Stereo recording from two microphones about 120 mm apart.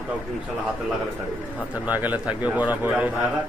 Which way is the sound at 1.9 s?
15° right (ahead or behind).